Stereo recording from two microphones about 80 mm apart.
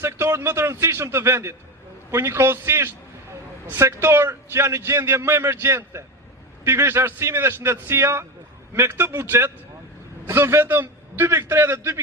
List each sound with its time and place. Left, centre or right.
0.0 s a man's voice: right